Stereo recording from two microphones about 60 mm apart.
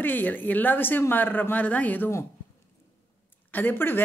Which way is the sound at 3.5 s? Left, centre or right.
Left.